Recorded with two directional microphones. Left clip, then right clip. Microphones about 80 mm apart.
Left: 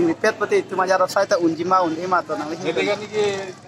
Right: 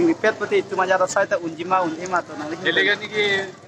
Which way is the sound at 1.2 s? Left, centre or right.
Centre.